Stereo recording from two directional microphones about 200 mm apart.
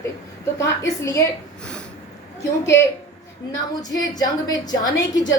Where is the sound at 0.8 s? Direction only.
15° left (ahead or behind).